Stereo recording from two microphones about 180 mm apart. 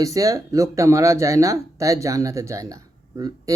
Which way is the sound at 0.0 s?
20° right (ahead or behind).